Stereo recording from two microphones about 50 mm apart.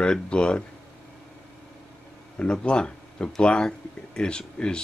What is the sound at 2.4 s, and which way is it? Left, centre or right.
Speech, left.